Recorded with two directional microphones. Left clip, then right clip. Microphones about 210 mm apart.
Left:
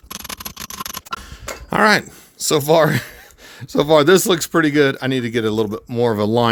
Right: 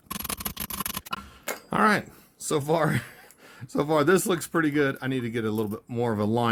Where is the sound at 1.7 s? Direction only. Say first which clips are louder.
Left 9 dB; 40° left (ahead or behind).